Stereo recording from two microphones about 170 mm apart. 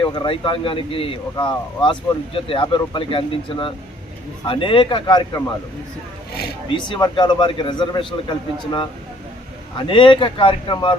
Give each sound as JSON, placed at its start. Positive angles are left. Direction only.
{"t": 0.0, "sound": "a man's voice", "side_deg": 25}
{"t": 6.7, "sound": "a man's voice", "side_deg": 25}